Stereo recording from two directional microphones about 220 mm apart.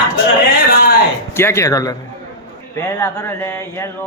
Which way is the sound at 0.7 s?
40° left (ahead or behind).